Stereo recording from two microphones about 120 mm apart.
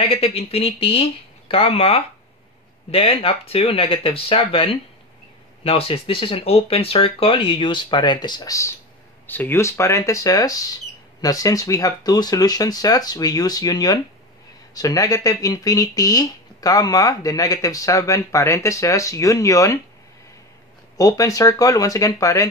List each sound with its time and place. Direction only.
0.0 s speech: 55° left (ahead or behind); by 19.8 s 25° left (ahead or behind)
21.0 s speech: 30° left (ahead or behind)